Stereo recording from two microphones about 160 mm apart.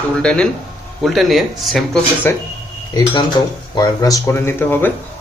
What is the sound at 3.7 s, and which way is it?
A man's voice, 25° left (ahead or behind).